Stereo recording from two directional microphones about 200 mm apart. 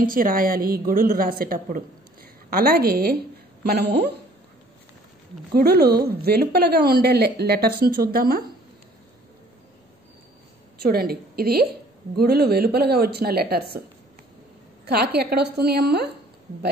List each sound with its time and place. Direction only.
0.0 s a woman's voice: 45° right (ahead or behind)
5.5 s speech: 50° right (ahead or behind)
10.8 s speech: 50° right (ahead or behind)
14.9 s speech: 50° right (ahead or behind)